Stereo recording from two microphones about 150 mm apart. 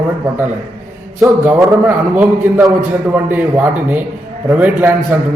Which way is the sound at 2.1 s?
5° right (ahead or behind).